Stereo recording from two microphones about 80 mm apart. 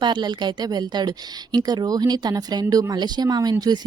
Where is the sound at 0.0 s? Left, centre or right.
Right.